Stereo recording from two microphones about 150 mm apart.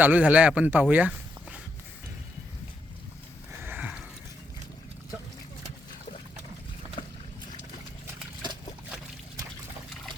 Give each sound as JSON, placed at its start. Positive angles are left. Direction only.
{"t": 0.0, "sound": "speech", "side_deg": -10}
{"t": 3.6, "sound": "a sound", "side_deg": -10}
{"t": 7.0, "sound": "boat", "side_deg": 35}